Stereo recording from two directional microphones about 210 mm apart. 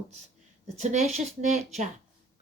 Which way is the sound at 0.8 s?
35° right (ahead or behind).